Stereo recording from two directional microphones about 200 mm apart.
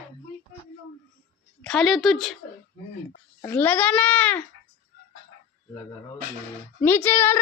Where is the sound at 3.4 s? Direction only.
10° left (ahead or behind).